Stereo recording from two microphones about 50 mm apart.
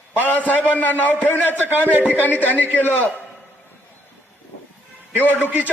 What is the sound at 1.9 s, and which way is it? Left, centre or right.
Speech, right.